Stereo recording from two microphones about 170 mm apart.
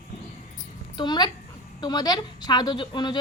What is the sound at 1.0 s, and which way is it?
A woman's voice, 25° left (ahead or behind).